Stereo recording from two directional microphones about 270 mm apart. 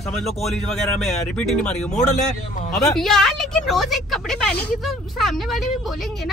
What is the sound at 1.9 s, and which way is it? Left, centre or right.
Speech, left.